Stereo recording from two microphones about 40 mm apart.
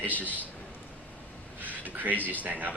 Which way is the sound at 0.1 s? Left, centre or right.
Left.